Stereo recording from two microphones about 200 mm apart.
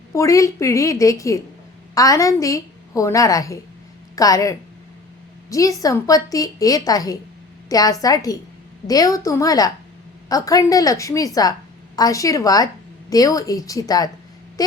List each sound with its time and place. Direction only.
0.1 s a woman's voice: 15° left (ahead or behind)